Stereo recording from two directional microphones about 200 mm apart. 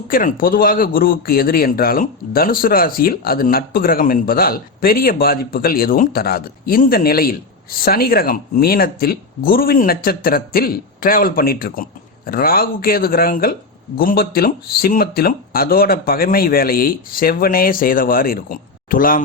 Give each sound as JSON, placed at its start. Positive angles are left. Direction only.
{"t": 0.1, "sound": "speech", "side_deg": 45}